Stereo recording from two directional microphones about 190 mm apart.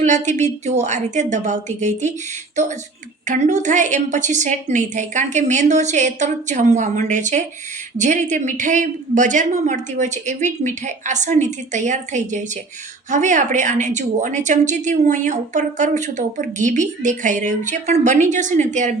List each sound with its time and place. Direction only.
0.0 s a woman's voice: 40° right (ahead or behind)
3.2 s a woman's voice: 40° right (ahead or behind)